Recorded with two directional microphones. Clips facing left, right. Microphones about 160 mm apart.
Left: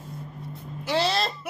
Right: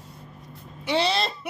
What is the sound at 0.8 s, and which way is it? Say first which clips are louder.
Speech: right 1 dB; centre (ahead or behind).